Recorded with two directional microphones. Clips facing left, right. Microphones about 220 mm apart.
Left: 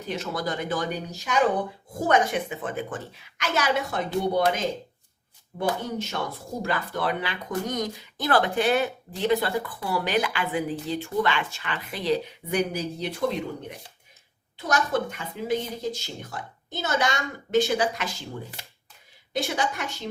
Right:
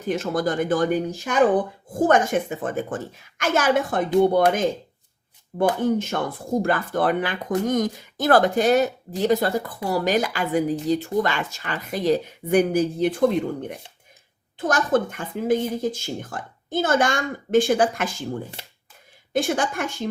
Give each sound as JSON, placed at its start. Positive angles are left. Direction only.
{"t": 0.1, "sound": "speech", "side_deg": -50}
{"t": 19.3, "sound": "speech", "side_deg": -50}